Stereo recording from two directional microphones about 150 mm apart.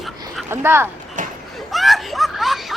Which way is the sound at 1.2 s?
60° right (ahead or behind).